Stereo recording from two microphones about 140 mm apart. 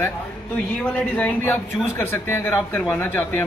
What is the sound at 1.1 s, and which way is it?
A man's voice, 15° left (ahead or behind).